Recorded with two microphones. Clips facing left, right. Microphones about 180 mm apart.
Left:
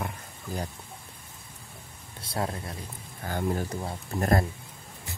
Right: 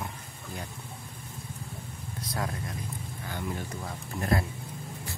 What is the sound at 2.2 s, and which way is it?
Speech, 30° left (ahead or behind).